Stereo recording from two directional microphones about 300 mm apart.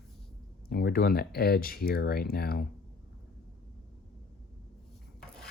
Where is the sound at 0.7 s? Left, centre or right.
Left.